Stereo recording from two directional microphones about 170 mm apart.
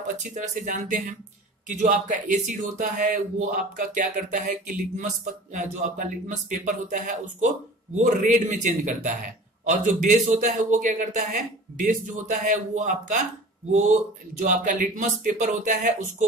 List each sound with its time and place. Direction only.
0.2 s speech: 45° right (ahead or behind)
14.4 s speech: 50° right (ahead or behind)